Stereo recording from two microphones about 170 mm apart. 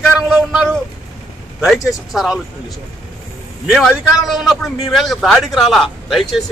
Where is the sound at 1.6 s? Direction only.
Centre (ahead or behind).